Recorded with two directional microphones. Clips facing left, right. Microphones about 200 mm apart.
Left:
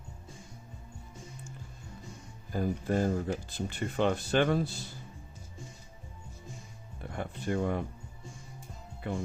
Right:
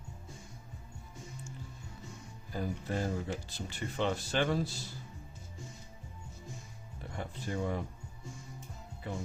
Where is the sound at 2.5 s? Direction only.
50° left (ahead or behind).